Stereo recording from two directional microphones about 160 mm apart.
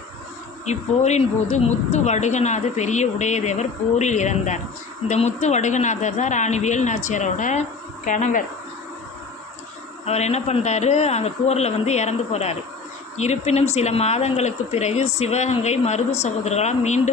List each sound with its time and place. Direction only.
0.6 s a woman's voice: 45° left (ahead or behind)
10.1 s a woman's voice: 45° left (ahead or behind)